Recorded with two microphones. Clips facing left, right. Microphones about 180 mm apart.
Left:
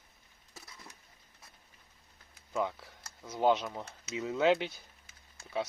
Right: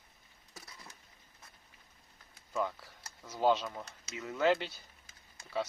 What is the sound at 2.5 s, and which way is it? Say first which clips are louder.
Speech: left 2 dB; 15° left (ahead or behind).